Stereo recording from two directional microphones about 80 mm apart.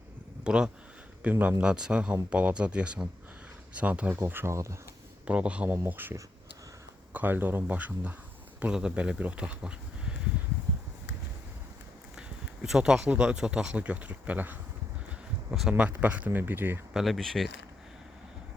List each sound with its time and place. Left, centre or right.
0.4 s speech: centre
4.2 s speech: right
4.5 s speech: right
5.2 s speech: centre
5.7 s speech: right
12.6 s speech: centre; by 14.6 s right
15.4 s speech: centre
15.8 s speech: centre
16.9 s speech: centre